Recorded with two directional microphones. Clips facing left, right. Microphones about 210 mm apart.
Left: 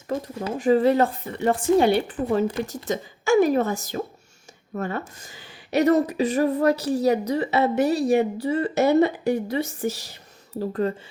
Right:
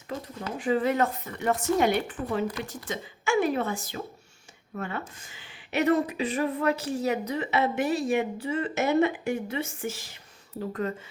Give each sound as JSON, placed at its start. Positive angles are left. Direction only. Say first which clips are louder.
{"t": 0.6, "sound": "speech", "louder": "left 6 dB", "side_deg": 35}